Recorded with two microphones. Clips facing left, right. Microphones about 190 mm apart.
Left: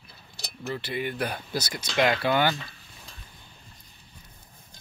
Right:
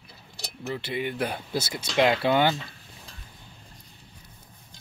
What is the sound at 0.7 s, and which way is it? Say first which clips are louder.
Speech: right 1 dB; 20° right (ahead or behind).